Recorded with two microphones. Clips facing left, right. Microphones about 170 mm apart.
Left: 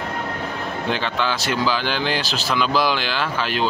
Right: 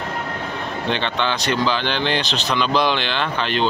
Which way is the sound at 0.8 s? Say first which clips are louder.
Right 1 dB; 5° left (ahead or behind).